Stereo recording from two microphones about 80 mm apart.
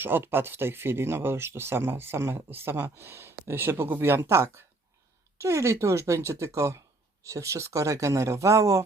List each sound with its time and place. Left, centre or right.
0.0 s speech: right